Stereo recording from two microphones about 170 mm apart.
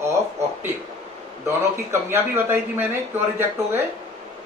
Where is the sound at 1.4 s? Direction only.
15° right (ahead or behind).